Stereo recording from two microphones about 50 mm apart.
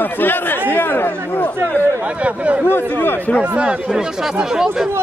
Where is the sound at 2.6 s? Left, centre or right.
Left.